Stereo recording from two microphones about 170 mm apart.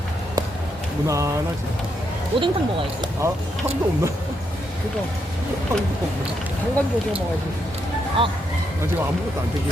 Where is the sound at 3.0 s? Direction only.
15° right (ahead or behind).